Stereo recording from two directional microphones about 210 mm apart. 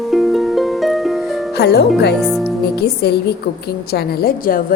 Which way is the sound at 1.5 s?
50° left (ahead or behind).